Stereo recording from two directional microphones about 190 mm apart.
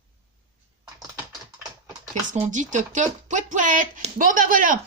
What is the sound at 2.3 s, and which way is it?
Speech, 40° right (ahead or behind).